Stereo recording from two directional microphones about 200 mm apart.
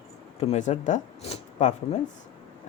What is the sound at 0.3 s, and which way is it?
Speech, 30° left (ahead or behind).